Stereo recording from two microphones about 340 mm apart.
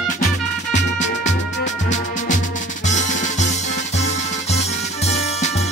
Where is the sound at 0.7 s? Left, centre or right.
Left.